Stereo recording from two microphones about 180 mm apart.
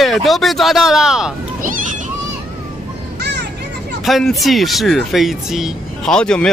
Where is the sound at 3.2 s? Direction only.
65° right (ahead or behind).